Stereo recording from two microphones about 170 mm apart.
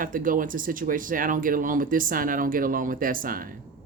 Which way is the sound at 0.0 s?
55° right (ahead or behind).